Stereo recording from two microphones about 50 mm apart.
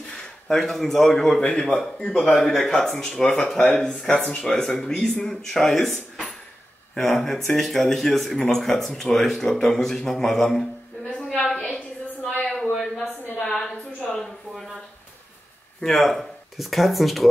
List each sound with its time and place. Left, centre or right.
0.5 s speech: centre
4.1 s speech: centre
4.5 s speech: centre
11.2 s a sound: centre
12.7 s a sound: centre
15.8 s speech: centre